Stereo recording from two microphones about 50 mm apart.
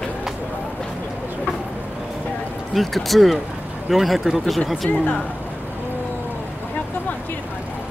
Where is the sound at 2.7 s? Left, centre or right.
Centre.